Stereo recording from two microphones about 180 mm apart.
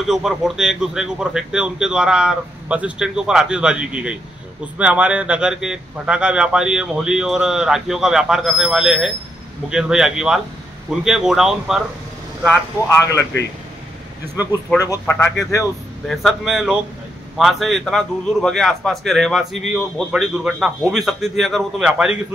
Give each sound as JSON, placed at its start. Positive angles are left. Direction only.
{"t": 0.0, "sound": "a man's voice", "side_deg": 0}
{"t": 12.8, "sound": "a man's voice", "side_deg": 15}
{"t": 14.9, "sound": "a man's voice", "side_deg": 10}
{"t": 16.1, "sound": "a man's voice", "side_deg": 0}